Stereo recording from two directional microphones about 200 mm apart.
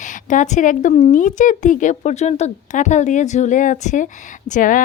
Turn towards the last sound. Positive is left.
turn(degrees=40)  # may be behind; listen again after turning